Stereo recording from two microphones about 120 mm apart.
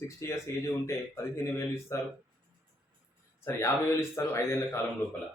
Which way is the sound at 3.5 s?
20° left (ahead or behind).